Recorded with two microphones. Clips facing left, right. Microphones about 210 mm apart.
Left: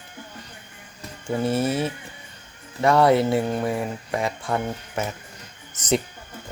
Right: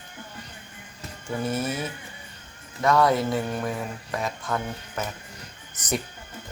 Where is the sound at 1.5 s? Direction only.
30° left (ahead or behind).